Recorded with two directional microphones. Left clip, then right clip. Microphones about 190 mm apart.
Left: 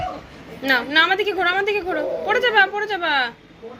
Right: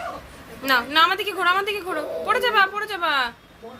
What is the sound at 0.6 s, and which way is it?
A woman's voice, 15° right (ahead or behind).